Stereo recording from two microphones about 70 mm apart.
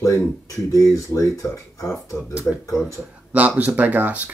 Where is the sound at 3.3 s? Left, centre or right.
Right.